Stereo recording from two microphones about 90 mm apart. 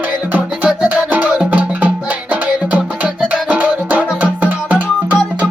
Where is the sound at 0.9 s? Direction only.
20° right (ahead or behind).